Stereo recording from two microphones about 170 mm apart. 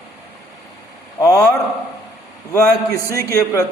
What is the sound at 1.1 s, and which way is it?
Speech, 20° left (ahead or behind).